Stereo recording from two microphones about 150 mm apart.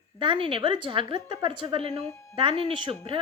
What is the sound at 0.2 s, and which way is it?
A woman's voice, 35° right (ahead or behind).